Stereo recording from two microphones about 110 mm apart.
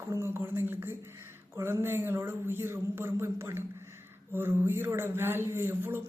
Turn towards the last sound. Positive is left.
turn(degrees=-20)  # may be behind; listen again after turning